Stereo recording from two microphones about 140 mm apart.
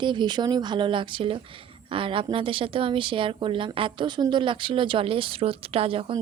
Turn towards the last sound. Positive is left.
turn(degrees=-40)  # may be behind; listen again after turning